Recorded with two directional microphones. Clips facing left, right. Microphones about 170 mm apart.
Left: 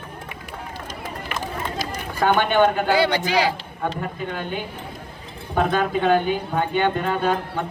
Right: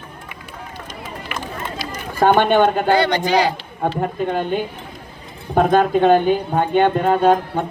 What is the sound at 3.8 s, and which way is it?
A woman's voice, 45° right (ahead or behind).